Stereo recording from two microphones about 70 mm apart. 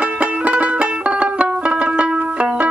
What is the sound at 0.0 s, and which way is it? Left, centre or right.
Music, centre.